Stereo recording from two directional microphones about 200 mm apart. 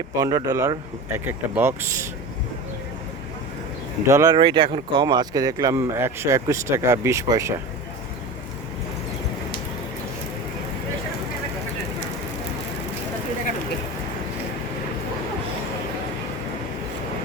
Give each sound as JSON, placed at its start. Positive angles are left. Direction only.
{"t": 0.2, "sound": "speech", "side_deg": -20}
{"t": 4.0, "sound": "speech", "side_deg": -15}